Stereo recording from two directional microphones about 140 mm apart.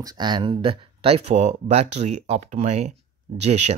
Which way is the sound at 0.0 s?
30° right (ahead or behind).